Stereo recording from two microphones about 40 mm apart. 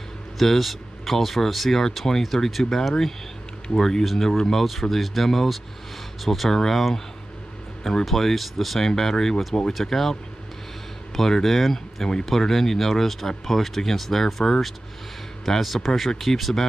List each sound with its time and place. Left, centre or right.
0.4 s speech: centre
4.4 s speech: centre
11.1 s speech: centre